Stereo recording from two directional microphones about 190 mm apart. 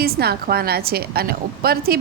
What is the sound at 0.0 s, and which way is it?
A woman's voice, 55° right (ahead or behind).